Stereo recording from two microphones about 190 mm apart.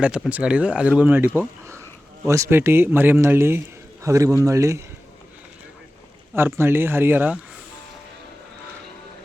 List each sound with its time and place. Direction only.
0.0 s speech: 5° right (ahead or behind)
6.3 s speech: 10° right (ahead or behind)